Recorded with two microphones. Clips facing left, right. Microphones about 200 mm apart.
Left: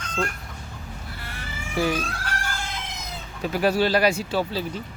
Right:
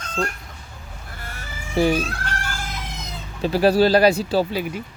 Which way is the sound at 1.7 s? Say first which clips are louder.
Right 5 dB; 25° right (ahead or behind).